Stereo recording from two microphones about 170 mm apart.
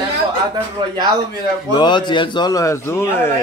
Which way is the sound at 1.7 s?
25° left (ahead or behind).